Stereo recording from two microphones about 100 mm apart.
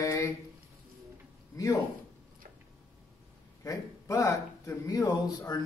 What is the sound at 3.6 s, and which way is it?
A man's voice, 35° left (ahead or behind).